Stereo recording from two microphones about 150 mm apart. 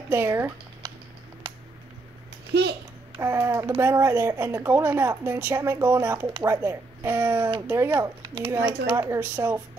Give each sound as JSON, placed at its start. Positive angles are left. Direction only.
{"t": 0.1, "sound": "speech", "side_deg": -15}
{"t": 3.2, "sound": "speech", "side_deg": -15}